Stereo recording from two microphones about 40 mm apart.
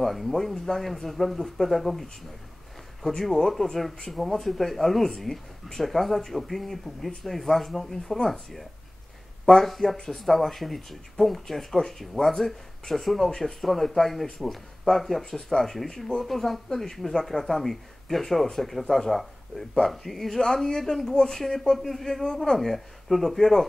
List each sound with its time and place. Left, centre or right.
0.0 s speech: centre
3.1 s speech: centre
9.7 s speech: centre